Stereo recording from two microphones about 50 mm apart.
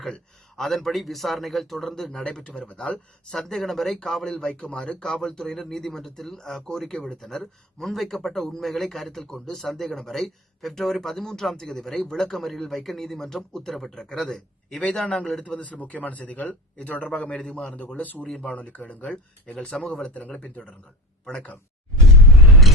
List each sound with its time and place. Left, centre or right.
0.1 s speech: centre
2.6 s speech: left
3.3 s speech: centre
14.8 s speech: left
17.1 s speech: centre
18.2 s speech: centre
22.3 s a sound: centre